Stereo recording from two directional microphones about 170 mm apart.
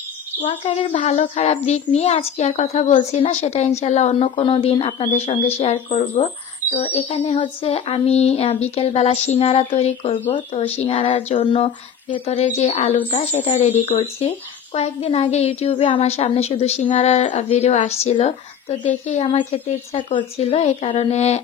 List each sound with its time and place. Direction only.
0.9 s speech: 45° left (ahead or behind)